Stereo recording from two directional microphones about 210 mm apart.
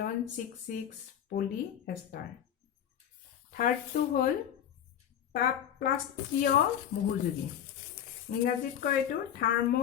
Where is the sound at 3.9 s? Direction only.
40° left (ahead or behind).